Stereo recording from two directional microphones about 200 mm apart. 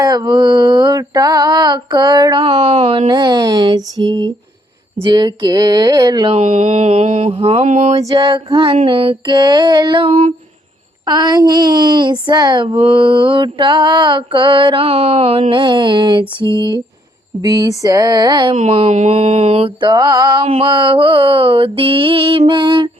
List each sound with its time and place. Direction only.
0.0 s speech: 20° right (ahead or behind)
5.0 s speech: 25° right (ahead or behind)
6.3 s speech: 35° right (ahead or behind)
18.5 s speech: 35° right (ahead or behind)